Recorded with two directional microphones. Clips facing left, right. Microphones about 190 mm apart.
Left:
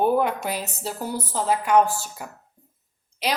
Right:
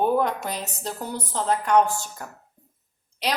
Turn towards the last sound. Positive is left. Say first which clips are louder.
# left 1 dB
turn(degrees=0)  # may be behind; listen again after turning